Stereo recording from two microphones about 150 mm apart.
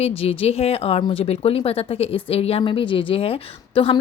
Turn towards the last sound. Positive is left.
turn(degrees=35)  # may be behind; listen again after turning